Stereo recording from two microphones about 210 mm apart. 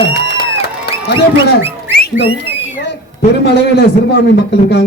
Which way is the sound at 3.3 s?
55° left (ahead or behind).